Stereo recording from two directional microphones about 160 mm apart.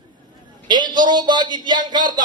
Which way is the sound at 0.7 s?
25° right (ahead or behind).